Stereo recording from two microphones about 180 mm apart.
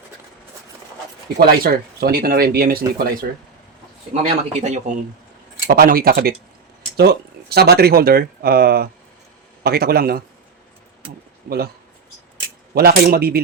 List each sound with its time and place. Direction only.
1.4 s speech: 60° right (ahead or behind)
4.1 s a man's voice: 35° right (ahead or behind)
5.6 s speech: 55° right (ahead or behind)
11.4 s speech: 60° right (ahead or behind)
12.7 s speech: 60° right (ahead or behind)